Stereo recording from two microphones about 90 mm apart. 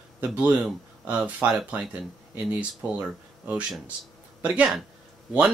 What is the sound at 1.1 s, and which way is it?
Speech, 15° right (ahead or behind).